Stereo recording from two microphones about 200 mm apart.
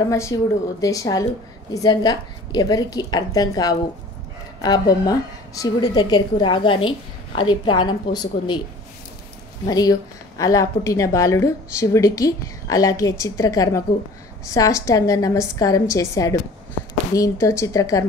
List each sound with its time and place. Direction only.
0.1 s a woman's voice: 15° left (ahead or behind)
9.7 s a woman's voice: 20° left (ahead or behind)